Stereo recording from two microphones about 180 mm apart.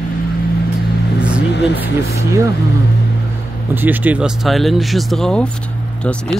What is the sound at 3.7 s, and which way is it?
Speech, 10° right (ahead or behind).